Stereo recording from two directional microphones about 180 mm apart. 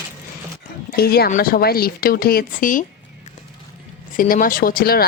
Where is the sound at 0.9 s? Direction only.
60° left (ahead or behind).